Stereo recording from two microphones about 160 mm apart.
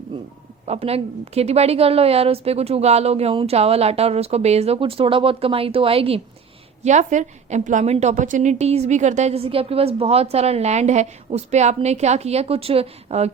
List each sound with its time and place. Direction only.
0.6 s a woman's voice: 40° right (ahead or behind)
6.8 s a woman's voice: 50° right (ahead or behind)